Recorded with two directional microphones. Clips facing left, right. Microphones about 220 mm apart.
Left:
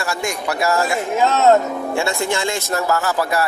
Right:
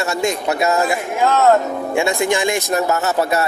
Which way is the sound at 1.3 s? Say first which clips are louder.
Right 1 dB; 20° left (ahead or behind).